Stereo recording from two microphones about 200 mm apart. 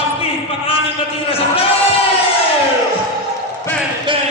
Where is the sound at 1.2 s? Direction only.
30° left (ahead or behind).